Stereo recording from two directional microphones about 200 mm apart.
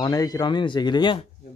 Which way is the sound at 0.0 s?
20° left (ahead or behind).